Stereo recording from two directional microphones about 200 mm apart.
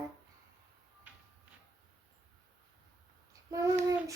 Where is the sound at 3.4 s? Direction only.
15° right (ahead or behind).